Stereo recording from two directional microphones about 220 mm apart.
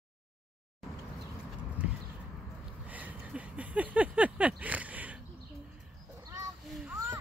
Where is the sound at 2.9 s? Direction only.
5° right (ahead or behind).